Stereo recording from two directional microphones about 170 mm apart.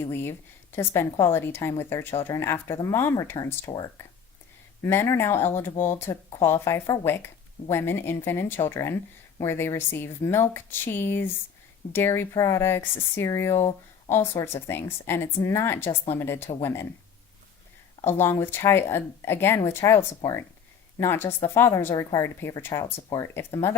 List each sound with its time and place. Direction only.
0.0 s speech: 15° left (ahead or behind)
18.0 s speech: 15° left (ahead or behind)